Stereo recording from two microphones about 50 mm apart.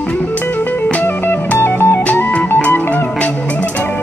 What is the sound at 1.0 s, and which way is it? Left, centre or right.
Music, left.